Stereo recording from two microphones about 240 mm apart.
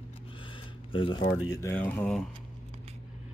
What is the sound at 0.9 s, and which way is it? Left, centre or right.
Speech, centre.